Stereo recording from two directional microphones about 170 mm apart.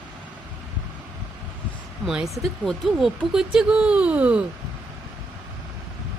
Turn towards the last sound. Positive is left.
turn(degrees=-5)  # may be behind; listen again after turning